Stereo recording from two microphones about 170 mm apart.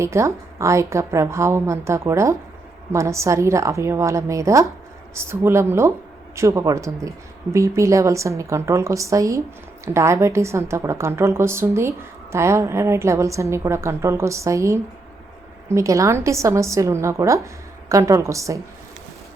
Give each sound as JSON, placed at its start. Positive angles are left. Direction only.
{"t": 0.0, "sound": "a woman's voice", "side_deg": -15}